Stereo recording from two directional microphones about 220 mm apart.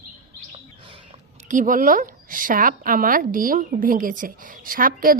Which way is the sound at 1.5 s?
35° right (ahead or behind).